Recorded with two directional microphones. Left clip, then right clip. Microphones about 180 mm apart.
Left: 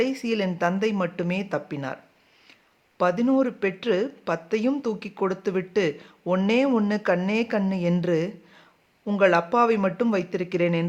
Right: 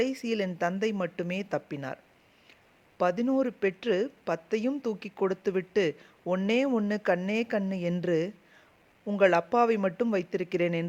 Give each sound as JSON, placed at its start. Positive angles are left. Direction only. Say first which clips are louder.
{"t": 0.0, "sound": "speech", "louder": "left 4 dB", "side_deg": -40}
{"t": 3.0, "sound": "speech", "louder": "left 5 dB", "side_deg": -40}